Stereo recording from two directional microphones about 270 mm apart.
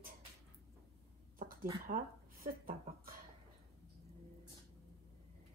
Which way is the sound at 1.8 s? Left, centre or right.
Right.